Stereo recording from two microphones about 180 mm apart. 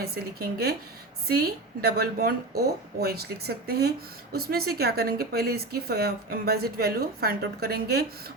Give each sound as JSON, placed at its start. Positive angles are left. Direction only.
{"t": 0.0, "sound": "a woman's voice", "side_deg": -60}